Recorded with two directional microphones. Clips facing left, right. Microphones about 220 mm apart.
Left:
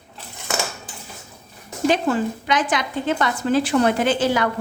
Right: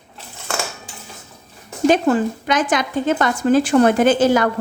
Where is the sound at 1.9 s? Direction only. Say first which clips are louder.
Right 4 dB; 45° right (ahead or behind).